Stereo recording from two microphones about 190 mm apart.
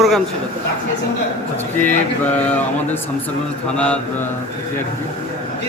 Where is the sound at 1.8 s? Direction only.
40° left (ahead or behind).